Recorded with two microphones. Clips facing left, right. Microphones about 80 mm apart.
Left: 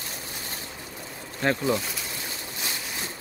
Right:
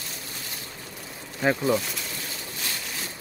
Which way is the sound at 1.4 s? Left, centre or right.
Centre.